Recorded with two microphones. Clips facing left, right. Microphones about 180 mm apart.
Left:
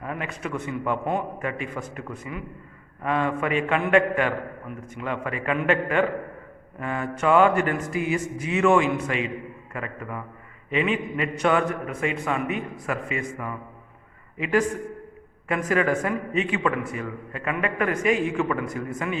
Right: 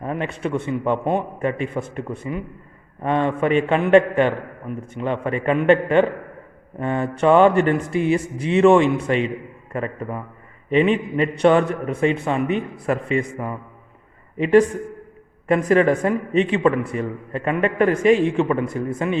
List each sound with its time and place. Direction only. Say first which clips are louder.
0.0 s a man's voice: right 6 dB; 30° right (ahead or behind)